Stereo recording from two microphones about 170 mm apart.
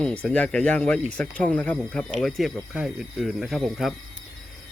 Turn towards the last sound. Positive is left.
turn(degrees=0)  # may be behind; listen again after turning